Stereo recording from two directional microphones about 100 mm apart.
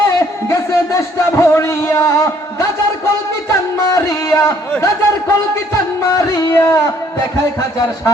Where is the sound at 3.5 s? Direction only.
35° left (ahead or behind).